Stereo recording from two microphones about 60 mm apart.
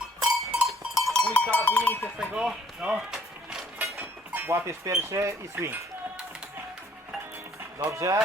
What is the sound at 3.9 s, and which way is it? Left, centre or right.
Speech, right.